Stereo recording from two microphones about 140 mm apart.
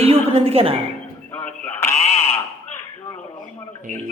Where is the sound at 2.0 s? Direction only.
50° left (ahead or behind).